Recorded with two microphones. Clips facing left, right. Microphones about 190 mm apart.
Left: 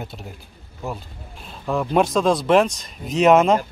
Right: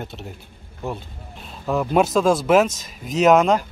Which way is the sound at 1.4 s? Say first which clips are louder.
Right 1 dB; 5° right (ahead or behind).